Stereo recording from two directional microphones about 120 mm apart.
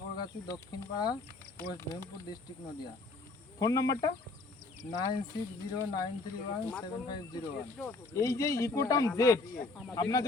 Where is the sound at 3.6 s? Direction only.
30° left (ahead or behind).